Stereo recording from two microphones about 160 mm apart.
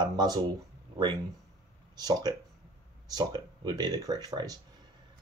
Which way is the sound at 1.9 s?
25° right (ahead or behind).